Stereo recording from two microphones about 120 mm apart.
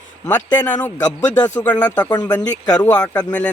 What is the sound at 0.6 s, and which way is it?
Speech, 10° left (ahead or behind).